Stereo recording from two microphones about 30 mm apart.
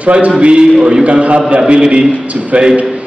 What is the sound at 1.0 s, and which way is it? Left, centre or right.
A man's voice, right.